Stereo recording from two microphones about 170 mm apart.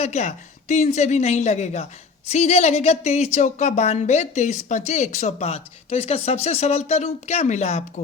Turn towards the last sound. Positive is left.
turn(degrees=40)  # may be behind; listen again after turning